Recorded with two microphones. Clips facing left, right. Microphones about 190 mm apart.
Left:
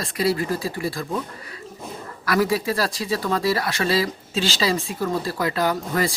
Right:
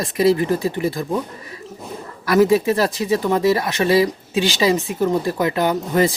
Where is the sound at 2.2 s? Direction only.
25° right (ahead or behind).